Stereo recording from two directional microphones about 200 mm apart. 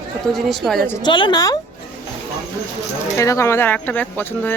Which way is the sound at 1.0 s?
20° left (ahead or behind).